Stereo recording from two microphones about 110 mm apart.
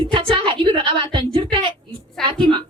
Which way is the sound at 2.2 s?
5° left (ahead or behind).